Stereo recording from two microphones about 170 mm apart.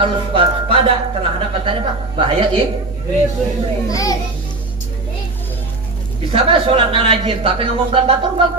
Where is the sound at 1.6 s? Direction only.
30° right (ahead or behind).